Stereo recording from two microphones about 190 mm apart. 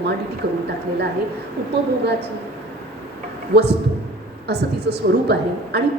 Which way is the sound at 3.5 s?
60° right (ahead or behind).